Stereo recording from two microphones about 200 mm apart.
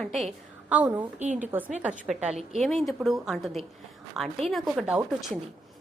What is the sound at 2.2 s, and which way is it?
Speech, 35° right (ahead or behind).